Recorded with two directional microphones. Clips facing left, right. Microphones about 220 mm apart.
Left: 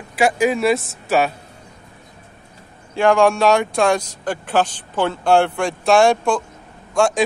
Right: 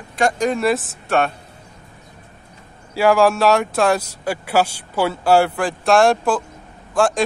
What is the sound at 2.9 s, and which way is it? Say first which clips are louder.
Speech: even; 5° right (ahead or behind).